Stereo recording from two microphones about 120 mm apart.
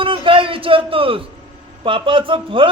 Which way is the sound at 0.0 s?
45° right (ahead or behind).